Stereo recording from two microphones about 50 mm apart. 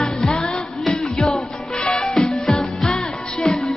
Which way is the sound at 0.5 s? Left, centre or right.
Centre.